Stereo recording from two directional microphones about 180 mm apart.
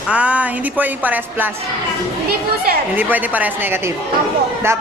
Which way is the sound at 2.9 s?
10° right (ahead or behind).